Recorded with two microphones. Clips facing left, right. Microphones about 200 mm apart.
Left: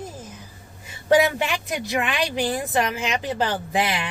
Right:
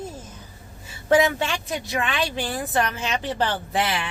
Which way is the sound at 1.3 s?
15° left (ahead or behind).